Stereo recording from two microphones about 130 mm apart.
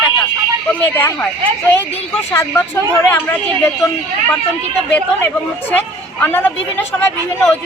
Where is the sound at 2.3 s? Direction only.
20° left (ahead or behind).